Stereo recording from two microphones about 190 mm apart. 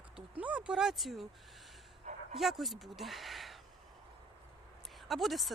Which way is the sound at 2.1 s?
35° right (ahead or behind).